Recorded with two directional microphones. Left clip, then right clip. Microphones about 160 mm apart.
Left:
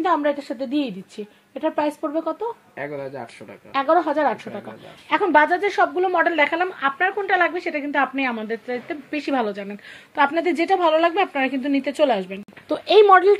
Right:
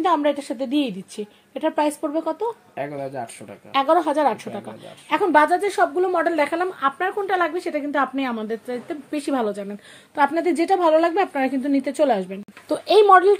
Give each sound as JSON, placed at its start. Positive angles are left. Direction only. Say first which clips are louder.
{"t": 0.0, "sound": "a woman's voice", "louder": "right 1 dB", "side_deg": -30}
{"t": 3.7, "sound": "a woman's voice", "louder": "right 1 dB", "side_deg": -25}
{"t": 12.6, "sound": "speech", "louder": "left 1 dB", "side_deg": -15}